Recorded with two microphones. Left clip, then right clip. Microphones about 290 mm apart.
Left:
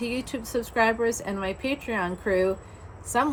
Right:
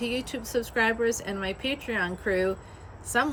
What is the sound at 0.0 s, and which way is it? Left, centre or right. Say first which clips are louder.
A woman's voice: even; centre.